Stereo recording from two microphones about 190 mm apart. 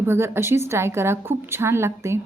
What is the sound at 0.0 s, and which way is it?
Speech, 15° right (ahead or behind).